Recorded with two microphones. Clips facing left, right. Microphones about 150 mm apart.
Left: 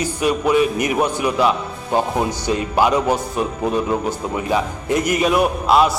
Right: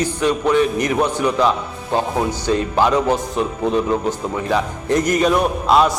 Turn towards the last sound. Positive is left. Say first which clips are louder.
# even
turn(degrees=5)  # may be behind; listen again after turning